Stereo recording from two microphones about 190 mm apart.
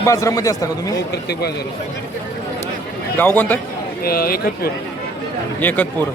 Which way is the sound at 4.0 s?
50° left (ahead or behind).